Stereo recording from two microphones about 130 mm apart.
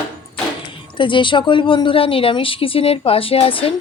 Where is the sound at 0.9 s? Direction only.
40° left (ahead or behind).